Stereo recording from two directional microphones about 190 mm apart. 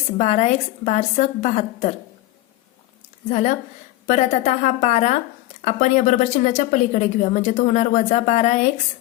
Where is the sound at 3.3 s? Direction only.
40° left (ahead or behind).